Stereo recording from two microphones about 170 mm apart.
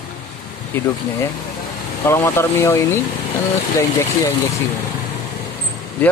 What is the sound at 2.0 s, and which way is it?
Speech, 15° left (ahead or behind).